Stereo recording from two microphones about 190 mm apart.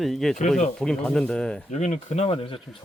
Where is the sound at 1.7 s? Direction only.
35° left (ahead or behind).